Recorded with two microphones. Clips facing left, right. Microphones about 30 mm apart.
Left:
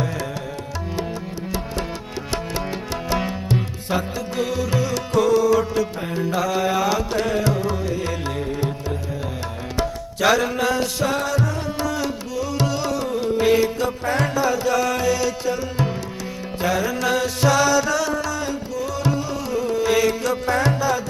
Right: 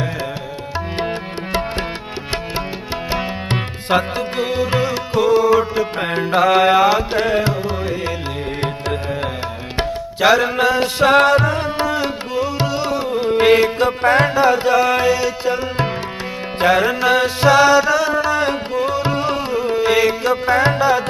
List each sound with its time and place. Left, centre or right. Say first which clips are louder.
3.5 s music: right 7 dB; right
4.4 s music: right 4 dB; right
6.0 s music: right 7 dB; right
7.5 s carnatic music: right 2 dB; right
8.4 s music: right 3 dB; right
9.7 s tabla: right 3 dB; right
10.2 s music: right 5 dB; right
11.0 s music: right 14 dB; right
11.8 s music: right 5 dB; right
13.3 s music: right 5 dB; right
16.6 s music: right 7 dB; right
17.0 s music: right 5 dB; right
19.5 s music: right 1 dB; right